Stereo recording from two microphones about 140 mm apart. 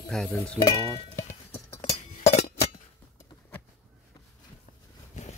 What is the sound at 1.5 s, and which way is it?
Chink, 50° left (ahead or behind).